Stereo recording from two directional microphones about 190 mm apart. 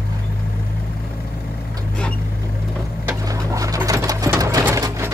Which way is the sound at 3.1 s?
15° right (ahead or behind).